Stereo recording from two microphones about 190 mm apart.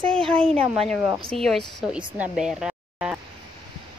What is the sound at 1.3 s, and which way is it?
Speech, centre (ahead or behind).